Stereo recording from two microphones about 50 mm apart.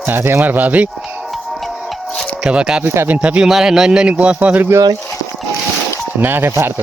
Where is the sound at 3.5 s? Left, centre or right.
Centre; by 4.6 s right.